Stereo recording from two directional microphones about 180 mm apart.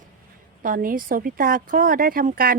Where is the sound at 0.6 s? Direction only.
50° right (ahead or behind).